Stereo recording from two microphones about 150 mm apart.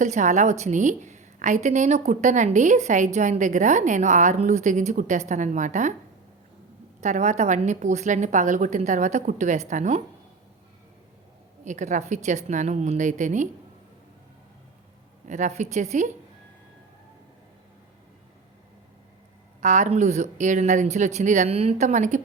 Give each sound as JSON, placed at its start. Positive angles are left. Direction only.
{"t": 0.0, "sound": "a woman's voice", "side_deg": -55}
{"t": 7.0, "sound": "a woman's voice", "side_deg": -50}
{"t": 11.6, "sound": "a woman's voice", "side_deg": -55}
{"t": 15.3, "sound": "a woman's voice", "side_deg": -55}
{"t": 19.6, "sound": "a woman's voice", "side_deg": -50}